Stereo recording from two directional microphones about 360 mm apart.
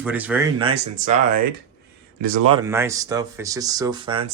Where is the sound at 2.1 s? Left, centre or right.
Right.